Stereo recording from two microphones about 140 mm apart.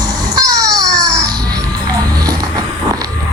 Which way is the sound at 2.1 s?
25° right (ahead or behind).